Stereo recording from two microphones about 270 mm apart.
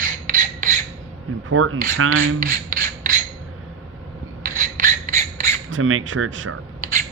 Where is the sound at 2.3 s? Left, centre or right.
Right.